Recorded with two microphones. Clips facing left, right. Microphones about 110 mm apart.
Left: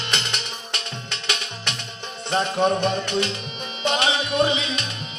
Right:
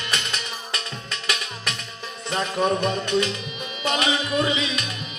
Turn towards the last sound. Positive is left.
turn(degrees=30)  # may be behind; listen again after turning